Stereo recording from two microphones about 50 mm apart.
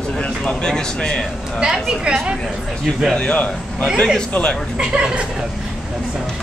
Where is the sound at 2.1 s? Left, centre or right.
Right.